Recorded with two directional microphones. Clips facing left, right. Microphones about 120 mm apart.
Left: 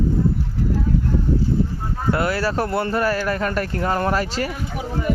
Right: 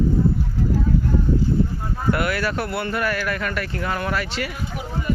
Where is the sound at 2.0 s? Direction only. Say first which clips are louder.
Left 1 dB; 30° left (ahead or behind).